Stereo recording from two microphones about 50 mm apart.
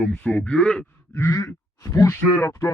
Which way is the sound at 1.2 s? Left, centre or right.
Left.